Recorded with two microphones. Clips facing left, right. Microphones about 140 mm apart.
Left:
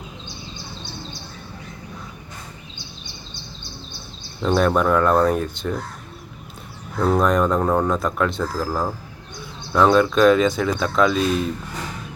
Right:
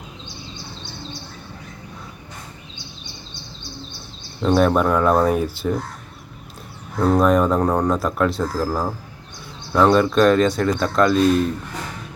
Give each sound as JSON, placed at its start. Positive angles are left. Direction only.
{"t": 4.4, "sound": "speech", "side_deg": -5}
{"t": 7.0, "sound": "speech", "side_deg": 0}